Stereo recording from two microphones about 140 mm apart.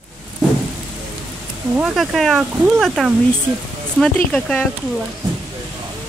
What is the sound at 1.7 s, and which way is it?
Speech, centre (ahead or behind).